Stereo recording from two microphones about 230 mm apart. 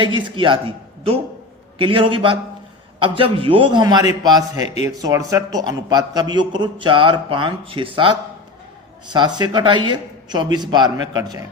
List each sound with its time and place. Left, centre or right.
0.0 s a man's voice: right
4.6 s speech: left
4.9 s a man's voice: centre
9.1 s a man's voice: centre